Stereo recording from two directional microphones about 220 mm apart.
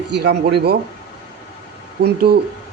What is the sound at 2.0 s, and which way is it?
Speech, 45° right (ahead or behind).